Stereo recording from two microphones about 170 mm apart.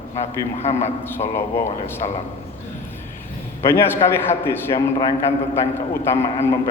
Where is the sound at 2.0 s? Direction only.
30° left (ahead or behind).